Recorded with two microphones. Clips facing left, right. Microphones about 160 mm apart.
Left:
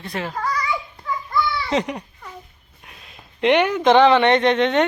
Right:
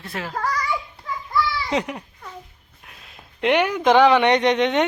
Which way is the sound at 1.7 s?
5° right (ahead or behind).